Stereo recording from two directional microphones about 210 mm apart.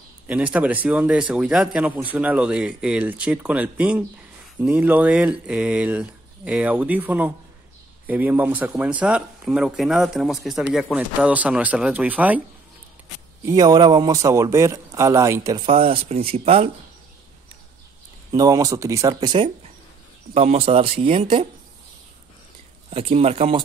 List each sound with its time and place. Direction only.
0.3 s speech: 5° right (ahead or behind)
13.5 s a man's voice: 20° right (ahead or behind)
18.3 s a man's voice: 15° right (ahead or behind)
22.8 s a man's voice: 30° right (ahead or behind)